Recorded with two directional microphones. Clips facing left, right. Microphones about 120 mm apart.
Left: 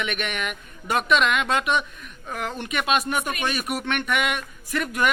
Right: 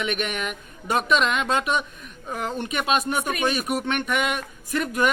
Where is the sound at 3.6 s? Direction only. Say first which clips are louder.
Right 2 dB; centre (ahead or behind).